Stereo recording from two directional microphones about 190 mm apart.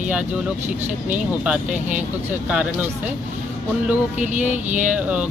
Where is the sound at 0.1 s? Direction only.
5° right (ahead or behind).